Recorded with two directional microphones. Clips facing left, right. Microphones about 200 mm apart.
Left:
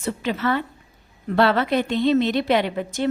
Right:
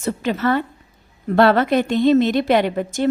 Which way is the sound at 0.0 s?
45° right (ahead or behind).